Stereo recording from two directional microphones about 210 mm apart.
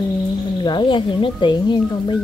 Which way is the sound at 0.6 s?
20° left (ahead or behind).